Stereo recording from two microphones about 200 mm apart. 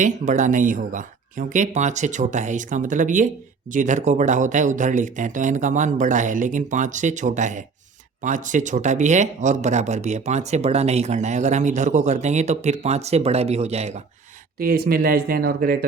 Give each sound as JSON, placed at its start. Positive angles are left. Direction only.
{"t": 0.0, "sound": "speech", "side_deg": -40}
{"t": 14.6, "sound": "speech", "side_deg": -45}